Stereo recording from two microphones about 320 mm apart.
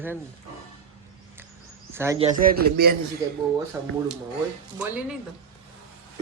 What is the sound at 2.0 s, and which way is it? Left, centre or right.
Speech, centre.